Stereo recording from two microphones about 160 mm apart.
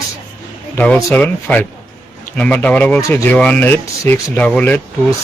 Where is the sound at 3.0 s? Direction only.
20° left (ahead or behind).